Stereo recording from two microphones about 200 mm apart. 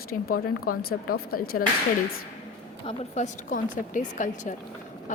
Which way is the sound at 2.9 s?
35° left (ahead or behind).